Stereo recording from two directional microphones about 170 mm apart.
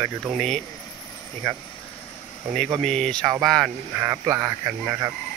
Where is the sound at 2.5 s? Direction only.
5° left (ahead or behind).